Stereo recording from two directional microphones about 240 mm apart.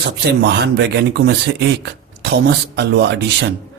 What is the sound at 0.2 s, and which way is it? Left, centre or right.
Speech, right.